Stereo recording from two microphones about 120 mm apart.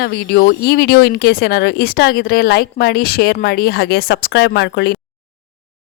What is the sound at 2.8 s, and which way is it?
Speech, 85° left.